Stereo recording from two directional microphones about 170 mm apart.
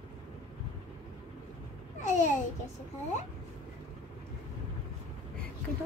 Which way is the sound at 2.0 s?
45° left (ahead or behind).